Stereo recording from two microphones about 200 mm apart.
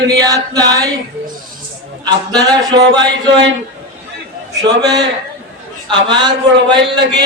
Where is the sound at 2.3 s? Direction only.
20° right (ahead or behind).